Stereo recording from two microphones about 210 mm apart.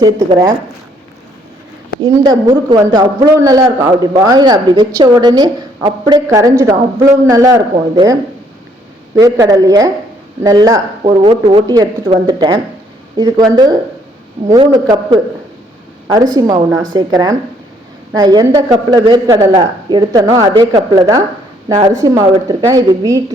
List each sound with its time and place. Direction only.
0.0 s speech: 20° right (ahead or behind)
2.0 s a man's voice: 20° right (ahead or behind)
9.1 s a man's voice: 15° right (ahead or behind)
14.5 s a man's voice: 20° right (ahead or behind)